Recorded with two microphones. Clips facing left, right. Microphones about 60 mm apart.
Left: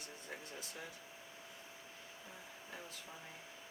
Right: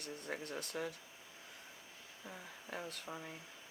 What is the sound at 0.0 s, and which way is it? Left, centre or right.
Speech, right.